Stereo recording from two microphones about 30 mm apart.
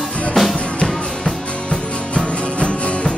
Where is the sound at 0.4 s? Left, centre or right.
Centre.